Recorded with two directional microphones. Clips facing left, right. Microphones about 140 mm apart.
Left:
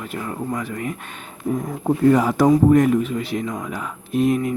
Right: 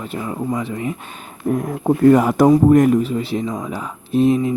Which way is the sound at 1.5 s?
65° right (ahead or behind).